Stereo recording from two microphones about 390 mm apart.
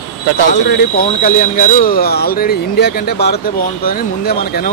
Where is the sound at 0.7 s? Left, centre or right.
Left.